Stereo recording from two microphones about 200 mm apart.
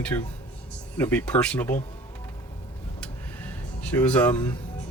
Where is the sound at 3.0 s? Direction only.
10° left (ahead or behind).